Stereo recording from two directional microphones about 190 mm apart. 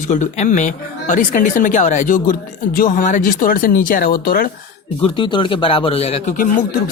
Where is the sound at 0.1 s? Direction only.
40° left (ahead or behind).